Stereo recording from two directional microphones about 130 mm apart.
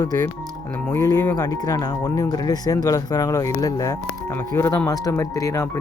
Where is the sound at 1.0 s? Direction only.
20° left (ahead or behind).